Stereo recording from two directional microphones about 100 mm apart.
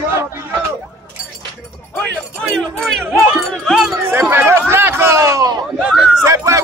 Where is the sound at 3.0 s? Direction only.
25° right (ahead or behind).